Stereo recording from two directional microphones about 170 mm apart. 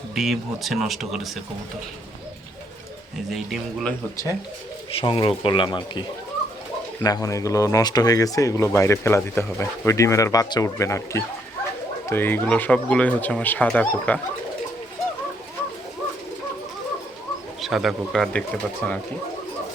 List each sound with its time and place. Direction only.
0.1 s speech: centre (ahead or behind)
3.2 s speech: centre (ahead or behind)
4.9 s speech: 30° left (ahead or behind); by 14.2 s 10° left (ahead or behind)
17.6 s speech: centre (ahead or behind)